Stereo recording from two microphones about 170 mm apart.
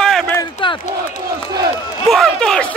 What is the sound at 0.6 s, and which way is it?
Crowd, 30° left (ahead or behind).